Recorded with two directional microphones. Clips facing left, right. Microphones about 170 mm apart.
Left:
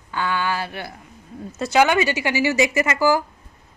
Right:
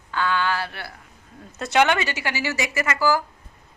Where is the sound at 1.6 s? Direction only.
5° left (ahead or behind).